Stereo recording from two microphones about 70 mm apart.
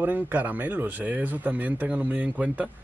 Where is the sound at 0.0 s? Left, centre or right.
Right.